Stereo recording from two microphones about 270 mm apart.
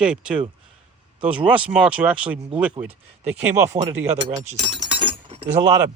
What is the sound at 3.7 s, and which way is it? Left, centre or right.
Speech, right.